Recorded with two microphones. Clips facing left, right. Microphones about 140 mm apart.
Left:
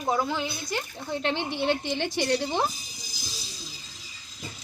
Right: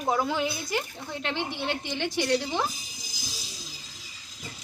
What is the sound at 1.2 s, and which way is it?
A woman's voice, 30° left (ahead or behind).